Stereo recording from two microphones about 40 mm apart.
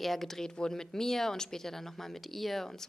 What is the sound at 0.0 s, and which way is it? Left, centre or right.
A woman's voice, centre.